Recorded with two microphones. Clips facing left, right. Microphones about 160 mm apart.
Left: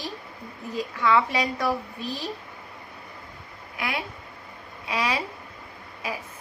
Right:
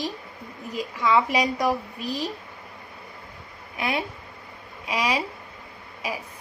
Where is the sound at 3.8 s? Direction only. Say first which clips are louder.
Right 4 dB; 25° right (ahead or behind).